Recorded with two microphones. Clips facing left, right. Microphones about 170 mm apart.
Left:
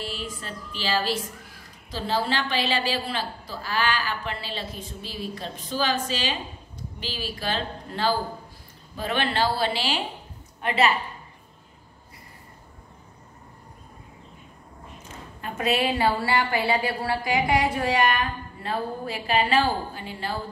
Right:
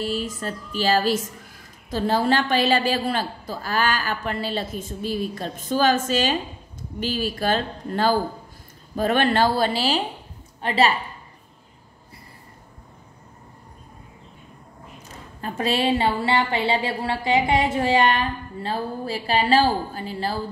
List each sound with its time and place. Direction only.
0.0 s a woman's voice: 45° right (ahead or behind)
15.4 s a woman's voice: 30° right (ahead or behind)